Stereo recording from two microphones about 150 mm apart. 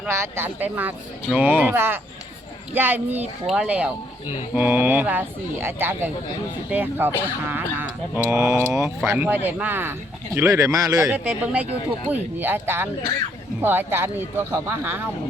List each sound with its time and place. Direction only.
0.1 s speech: 15° right (ahead or behind)
8.3 s a man's voice: 20° right (ahead or behind)
9.0 s a man's voice: 5° right (ahead or behind); by 11.1 s 25° right (ahead or behind)
11.1 s speech: 10° right (ahead or behind)